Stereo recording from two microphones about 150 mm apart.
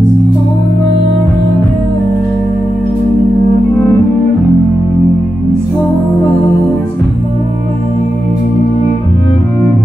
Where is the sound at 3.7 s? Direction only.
20° left (ahead or behind).